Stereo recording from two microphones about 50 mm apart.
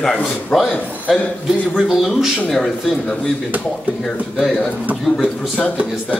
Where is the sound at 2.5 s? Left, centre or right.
Centre.